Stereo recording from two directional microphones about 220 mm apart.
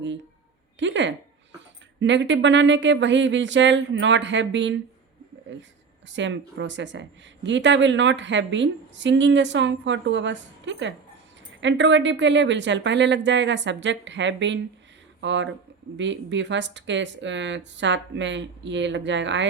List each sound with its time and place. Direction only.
0.8 s a woman's voice: 55° right (ahead or behind)